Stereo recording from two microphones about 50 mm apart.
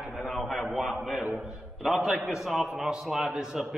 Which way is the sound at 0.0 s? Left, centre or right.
Centre.